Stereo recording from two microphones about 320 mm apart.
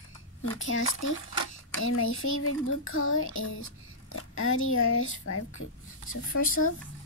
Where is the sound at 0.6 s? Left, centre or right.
Left.